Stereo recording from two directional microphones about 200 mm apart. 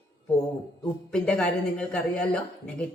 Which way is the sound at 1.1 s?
5° left (ahead or behind).